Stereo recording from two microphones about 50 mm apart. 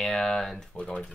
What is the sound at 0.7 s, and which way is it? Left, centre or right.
Speech, left.